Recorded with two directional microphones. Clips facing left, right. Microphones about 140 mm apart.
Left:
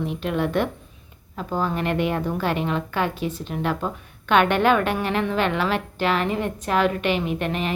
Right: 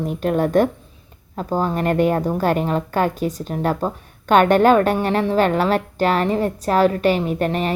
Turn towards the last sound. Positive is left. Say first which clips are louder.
# right 5 dB
turn(degrees=-40)  # may be behind; listen again after turning